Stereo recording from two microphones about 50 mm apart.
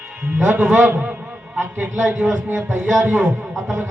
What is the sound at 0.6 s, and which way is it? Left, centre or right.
Speech, right.